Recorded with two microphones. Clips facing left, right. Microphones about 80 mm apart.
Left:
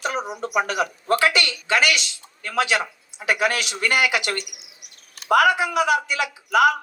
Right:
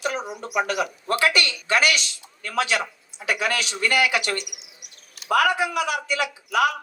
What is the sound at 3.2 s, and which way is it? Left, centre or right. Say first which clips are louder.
Speech: left 4 dB; left.